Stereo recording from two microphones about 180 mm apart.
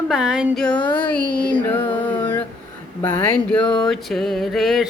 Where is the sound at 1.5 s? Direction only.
10° left (ahead or behind).